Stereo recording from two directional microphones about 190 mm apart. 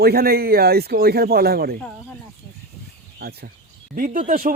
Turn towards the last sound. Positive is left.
turn(degrees=-45)  # may be behind; listen again after turning